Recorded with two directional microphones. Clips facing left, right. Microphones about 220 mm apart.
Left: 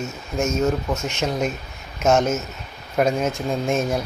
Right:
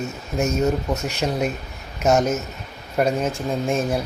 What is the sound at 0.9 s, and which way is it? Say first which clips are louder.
Speech: even; 35° right (ahead or behind).